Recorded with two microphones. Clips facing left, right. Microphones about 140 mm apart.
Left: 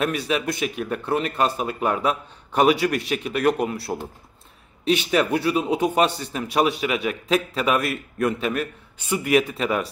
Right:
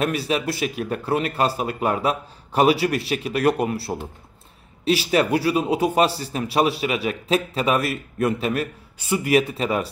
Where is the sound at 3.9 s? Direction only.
5° right (ahead or behind).